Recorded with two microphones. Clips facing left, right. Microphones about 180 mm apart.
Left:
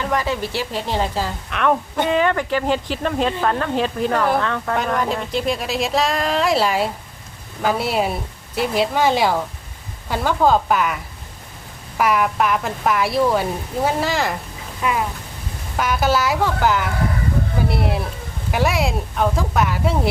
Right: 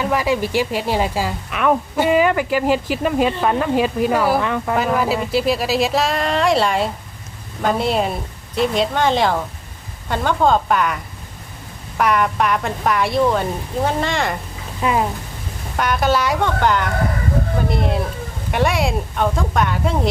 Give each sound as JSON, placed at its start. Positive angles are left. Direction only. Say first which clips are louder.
{"t": 0.0, "sound": "a woman's voice", "louder": "right 3 dB", "side_deg": -10}
{"t": 14.8, "sound": "speech", "louder": "right 3 dB", "side_deg": -30}
{"t": 15.8, "sound": "a woman's voice", "louder": "right 1 dB", "side_deg": 0}